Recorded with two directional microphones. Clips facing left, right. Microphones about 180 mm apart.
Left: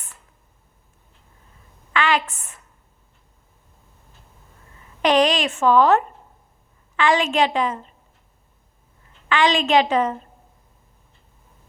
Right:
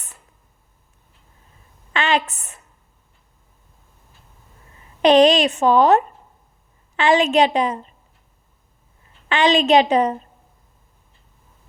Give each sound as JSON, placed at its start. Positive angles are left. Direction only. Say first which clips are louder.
{"t": 1.9, "sound": "a woman's voice", "louder": "right 1 dB", "side_deg": -20}
{"t": 5.0, "sound": "a woman's voice", "louder": "right 5 dB", "side_deg": -20}
{"t": 9.3, "sound": "a woman's voice", "louder": "right 3 dB", "side_deg": -20}